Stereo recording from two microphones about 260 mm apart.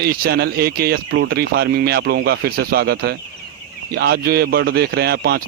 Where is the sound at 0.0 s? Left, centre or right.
Right.